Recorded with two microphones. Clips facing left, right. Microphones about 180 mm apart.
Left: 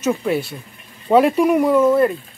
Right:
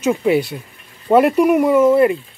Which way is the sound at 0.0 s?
10° right (ahead or behind).